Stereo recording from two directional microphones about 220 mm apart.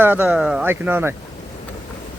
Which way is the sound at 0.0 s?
10° right (ahead or behind).